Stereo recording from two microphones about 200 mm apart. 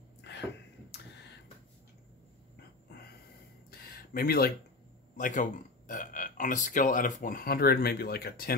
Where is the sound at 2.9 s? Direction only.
50° left (ahead or behind).